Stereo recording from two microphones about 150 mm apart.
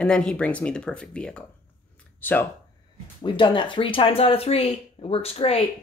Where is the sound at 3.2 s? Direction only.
30° left (ahead or behind).